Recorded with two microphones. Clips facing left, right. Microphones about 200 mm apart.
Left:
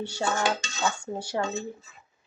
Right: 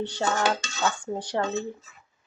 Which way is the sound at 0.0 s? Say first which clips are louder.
Right 2 dB; 10° left (ahead or behind).